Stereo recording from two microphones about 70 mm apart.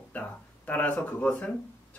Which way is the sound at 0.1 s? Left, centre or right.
Left.